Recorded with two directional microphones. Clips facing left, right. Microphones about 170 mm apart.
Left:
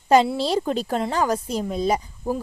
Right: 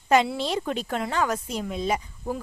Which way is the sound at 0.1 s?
35° left (ahead or behind).